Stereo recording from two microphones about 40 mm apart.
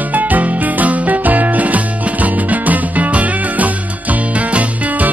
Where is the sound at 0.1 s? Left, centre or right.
Right.